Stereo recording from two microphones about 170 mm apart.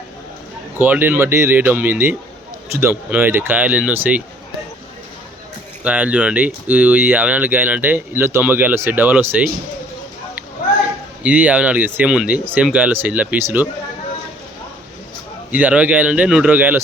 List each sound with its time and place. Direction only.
0.8 s speech: 10° right (ahead or behind)
5.8 s speech: 5° right (ahead or behind)
11.2 s speech: 10° right (ahead or behind)
15.5 s speech: 10° right (ahead or behind)